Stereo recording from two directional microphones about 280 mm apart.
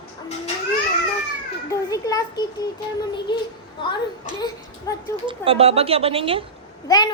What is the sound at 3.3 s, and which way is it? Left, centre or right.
Speech, centre.